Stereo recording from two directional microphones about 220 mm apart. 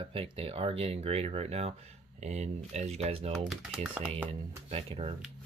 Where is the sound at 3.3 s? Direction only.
Centre (ahead or behind).